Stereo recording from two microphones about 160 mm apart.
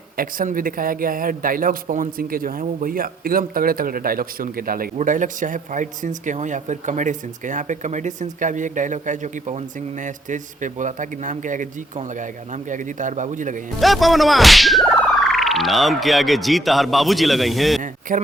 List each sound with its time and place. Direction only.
0.2 s speech: 60° right (ahead or behind)
13.7 s whip: centre (ahead or behind)
18.1 s speech: 55° right (ahead or behind)